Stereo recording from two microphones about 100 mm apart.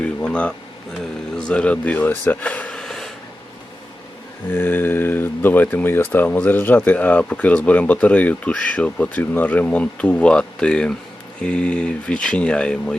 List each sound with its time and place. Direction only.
0.0 s speech: 10° left (ahead or behind)
4.4 s speech: 20° left (ahead or behind)